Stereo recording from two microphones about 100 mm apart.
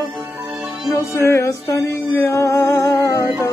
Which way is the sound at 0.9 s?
25° left (ahead or behind).